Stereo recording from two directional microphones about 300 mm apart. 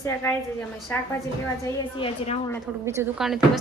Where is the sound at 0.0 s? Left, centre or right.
Centre.